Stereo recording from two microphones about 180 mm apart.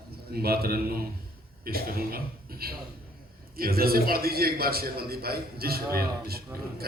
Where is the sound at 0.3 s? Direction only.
60° right (ahead or behind).